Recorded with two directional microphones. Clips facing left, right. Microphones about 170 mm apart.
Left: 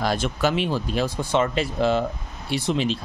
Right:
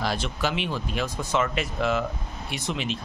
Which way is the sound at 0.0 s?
45° left (ahead or behind).